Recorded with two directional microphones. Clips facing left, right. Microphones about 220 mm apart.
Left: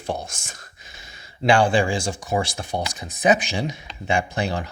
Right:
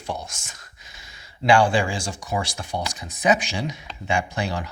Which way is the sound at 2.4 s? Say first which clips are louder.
Left 2 dB; 25° left (ahead or behind).